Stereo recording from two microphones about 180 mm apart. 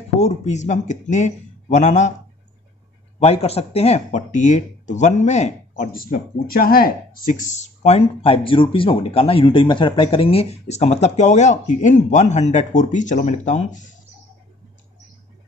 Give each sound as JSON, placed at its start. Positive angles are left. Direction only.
{"t": 0.2, "sound": "speech", "side_deg": 40}
{"t": 3.2, "sound": "speech", "side_deg": 35}